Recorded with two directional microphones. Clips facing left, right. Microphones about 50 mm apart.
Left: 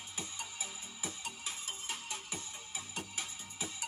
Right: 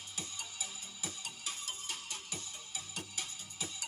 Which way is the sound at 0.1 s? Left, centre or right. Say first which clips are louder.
Left 2 dB; left.